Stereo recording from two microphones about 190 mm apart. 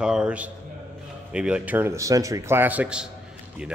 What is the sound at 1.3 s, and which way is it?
A man's voice, 5° right (ahead or behind).